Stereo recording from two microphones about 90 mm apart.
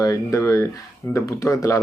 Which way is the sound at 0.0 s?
35° left (ahead or behind).